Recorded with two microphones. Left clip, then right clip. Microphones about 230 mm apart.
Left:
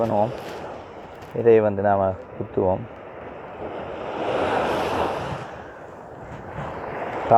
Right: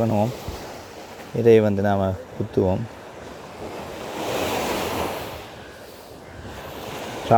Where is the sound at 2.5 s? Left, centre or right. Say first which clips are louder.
Even; right.